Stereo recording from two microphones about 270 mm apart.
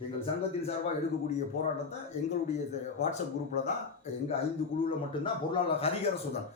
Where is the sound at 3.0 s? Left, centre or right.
Left.